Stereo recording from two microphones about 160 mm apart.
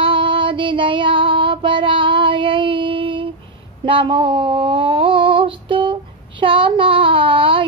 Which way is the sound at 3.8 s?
30° right (ahead or behind).